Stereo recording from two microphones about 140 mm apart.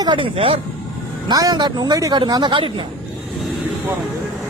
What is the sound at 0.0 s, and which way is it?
Speech, 35° right (ahead or behind).